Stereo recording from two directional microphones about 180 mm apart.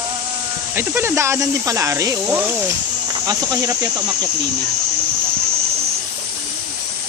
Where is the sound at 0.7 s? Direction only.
15° right (ahead or behind).